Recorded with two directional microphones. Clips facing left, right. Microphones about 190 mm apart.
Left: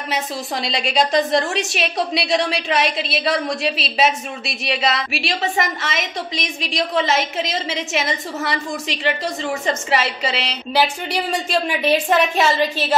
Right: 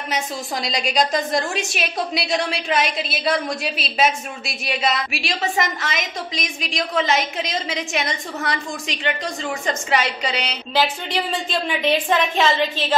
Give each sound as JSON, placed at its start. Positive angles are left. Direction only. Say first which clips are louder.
{"t": 0.1, "sound": "a woman's voice", "louder": "left 1 dB", "side_deg": 0}